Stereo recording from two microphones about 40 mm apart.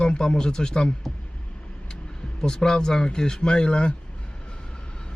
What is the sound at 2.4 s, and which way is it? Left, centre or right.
Speech, centre.